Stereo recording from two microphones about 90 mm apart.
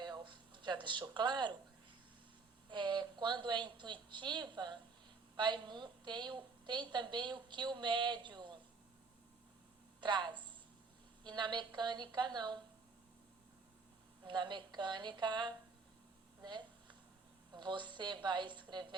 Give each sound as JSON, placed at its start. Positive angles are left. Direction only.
{"t": 0.0, "sound": "a sound", "side_deg": -55}
{"t": 1.1, "sound": "a woman's voice", "side_deg": -55}
{"t": 2.6, "sound": "a woman's voice", "side_deg": -60}
{"t": 10.0, "sound": "a woman's voice", "side_deg": -55}
{"t": 14.3, "sound": "a woman's voice", "side_deg": -55}
{"t": 16.4, "sound": "a sound", "side_deg": -60}
{"t": 17.5, "sound": "a woman's voice", "side_deg": -60}